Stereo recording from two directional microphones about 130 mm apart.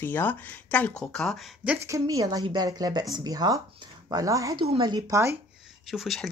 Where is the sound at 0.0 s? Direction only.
15° left (ahead or behind); by 1.8 s 5° right (ahead or behind).